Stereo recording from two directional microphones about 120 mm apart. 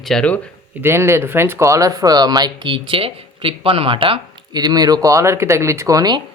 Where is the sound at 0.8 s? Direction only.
20° right (ahead or behind).